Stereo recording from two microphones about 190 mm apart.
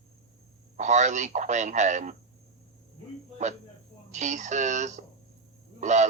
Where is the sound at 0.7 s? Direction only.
40° right (ahead or behind).